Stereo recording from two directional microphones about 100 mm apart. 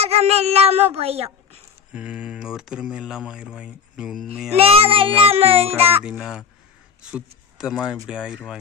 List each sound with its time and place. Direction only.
0.0 s a child's voice: 90° right
2.0 s speech: 10° right (ahead or behind)
4.6 s child singing: 75° right (ahead or behind)
6.0 s speech: 5° right (ahead or behind)